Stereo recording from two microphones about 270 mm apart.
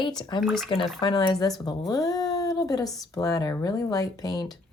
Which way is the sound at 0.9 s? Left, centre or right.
Centre.